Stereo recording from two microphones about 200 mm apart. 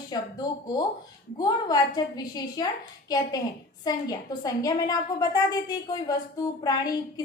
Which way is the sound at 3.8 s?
20° left (ahead or behind).